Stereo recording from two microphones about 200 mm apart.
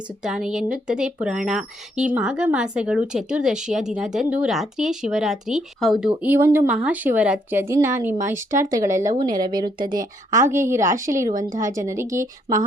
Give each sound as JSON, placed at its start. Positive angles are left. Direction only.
{"t": 0.2, "sound": "speech", "side_deg": -5}
{"t": 9.0, "sound": "a woman's voice", "side_deg": -40}
{"t": 10.5, "sound": "speech", "side_deg": -15}
{"t": 10.9, "sound": "speech", "side_deg": -40}
{"t": 11.8, "sound": "speech", "side_deg": -15}